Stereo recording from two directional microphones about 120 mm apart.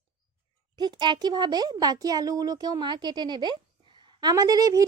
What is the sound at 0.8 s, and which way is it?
A child's voice, 35° right (ahead or behind).